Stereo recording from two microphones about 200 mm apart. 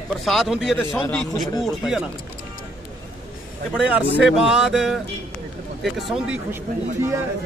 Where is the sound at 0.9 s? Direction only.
10° left (ahead or behind).